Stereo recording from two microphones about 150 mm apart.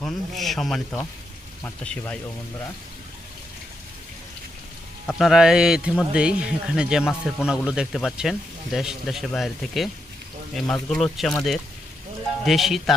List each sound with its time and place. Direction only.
0.0 s speech: centre (ahead or behind)
5.1 s a man's voice: centre (ahead or behind)
12.5 s a man's voice: centre (ahead or behind)